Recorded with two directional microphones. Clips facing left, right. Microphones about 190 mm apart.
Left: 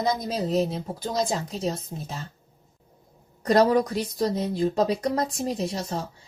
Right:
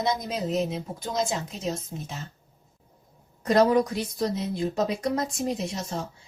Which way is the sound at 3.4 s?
35° left (ahead or behind).